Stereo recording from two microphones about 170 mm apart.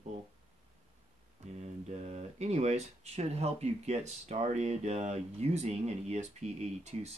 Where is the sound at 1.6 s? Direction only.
40° right (ahead or behind).